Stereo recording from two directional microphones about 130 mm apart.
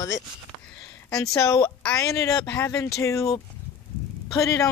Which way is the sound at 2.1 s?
25° left (ahead or behind).